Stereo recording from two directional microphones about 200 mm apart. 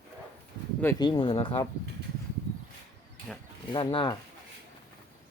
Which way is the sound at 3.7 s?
25° left (ahead or behind).